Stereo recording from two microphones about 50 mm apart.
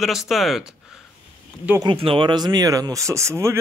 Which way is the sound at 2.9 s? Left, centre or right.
Right.